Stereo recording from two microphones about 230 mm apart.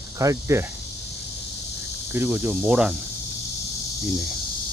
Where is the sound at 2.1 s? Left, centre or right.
Centre.